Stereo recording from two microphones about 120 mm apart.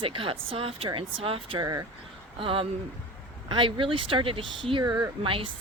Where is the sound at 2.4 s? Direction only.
50° right (ahead or behind).